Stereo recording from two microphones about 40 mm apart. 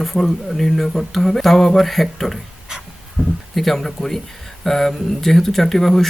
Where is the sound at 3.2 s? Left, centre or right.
Right.